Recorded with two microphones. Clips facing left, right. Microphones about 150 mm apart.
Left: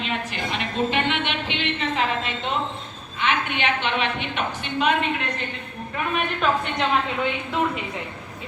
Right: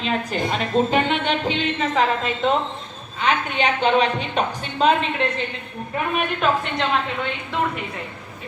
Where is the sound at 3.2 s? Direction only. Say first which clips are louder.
Right 3 dB; 40° right (ahead or behind).